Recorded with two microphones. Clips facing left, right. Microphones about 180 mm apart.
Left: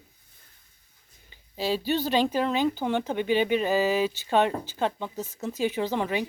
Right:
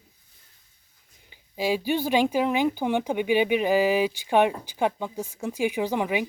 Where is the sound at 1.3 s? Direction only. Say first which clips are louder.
Right 2 dB; 10° right (ahead or behind).